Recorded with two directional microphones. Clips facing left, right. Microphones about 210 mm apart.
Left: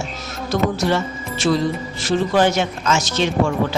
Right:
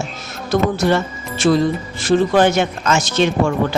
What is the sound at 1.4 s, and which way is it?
Speech, 50° right (ahead or behind).